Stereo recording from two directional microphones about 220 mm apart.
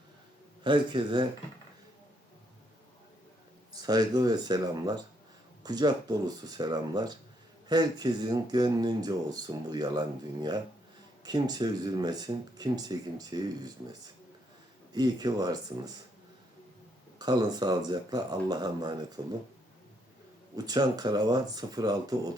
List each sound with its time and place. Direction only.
0.6 s speech: 20° right (ahead or behind)
3.7 s speech: 15° right (ahead or behind)
14.9 s speech: 15° right (ahead or behind)
17.2 s speech: 20° right (ahead or behind)
20.6 s speech: 15° right (ahead or behind)